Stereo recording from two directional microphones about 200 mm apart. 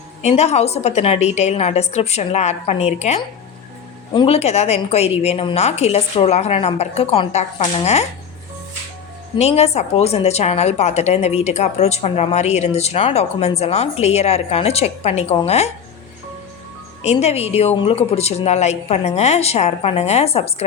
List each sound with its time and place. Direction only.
0.2 s a woman's voice: 35° left (ahead or behind)
9.4 s a woman's voice: 30° left (ahead or behind)
17.0 s a woman's voice: 30° left (ahead or behind)